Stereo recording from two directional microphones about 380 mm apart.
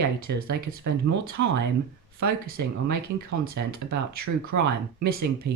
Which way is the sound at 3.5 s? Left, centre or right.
Right.